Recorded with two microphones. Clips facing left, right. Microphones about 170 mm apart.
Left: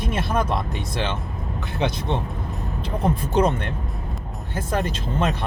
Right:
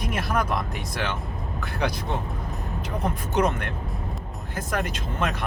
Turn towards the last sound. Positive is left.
turn(degrees=30)  # may be behind; listen again after turning